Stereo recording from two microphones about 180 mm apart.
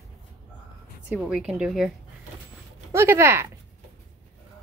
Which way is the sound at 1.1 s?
5° right (ahead or behind).